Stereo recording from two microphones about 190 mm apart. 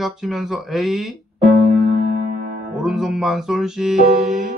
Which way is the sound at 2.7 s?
Centre (ahead or behind).